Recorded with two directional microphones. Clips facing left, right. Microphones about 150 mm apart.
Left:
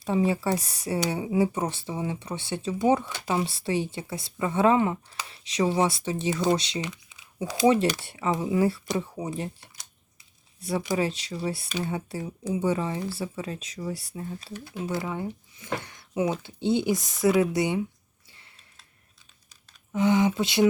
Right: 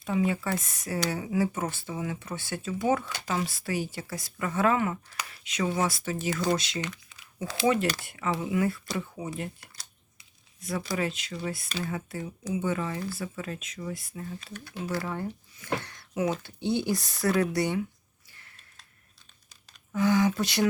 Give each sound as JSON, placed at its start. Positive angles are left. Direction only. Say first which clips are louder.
{"t": 0.0, "sound": "speech", "louder": "left 3 dB", "side_deg": 30}
{"t": 6.9, "sound": "crumpling", "louder": "left 1 dB", "side_deg": 20}
{"t": 8.0, "sound": "speech", "louder": "left 3 dB", "side_deg": 25}
{"t": 15.5, "sound": "a sound", "louder": "even", "side_deg": 20}
{"t": 16.6, "sound": "speech", "louder": "left 3 dB", "side_deg": 20}
{"t": 19.9, "sound": "speech", "louder": "left 2 dB", "side_deg": 25}